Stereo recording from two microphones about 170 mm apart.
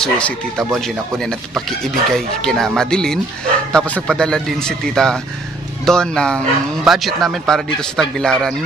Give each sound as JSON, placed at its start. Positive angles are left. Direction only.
{"t": 0.0, "sound": "speech", "side_deg": 5}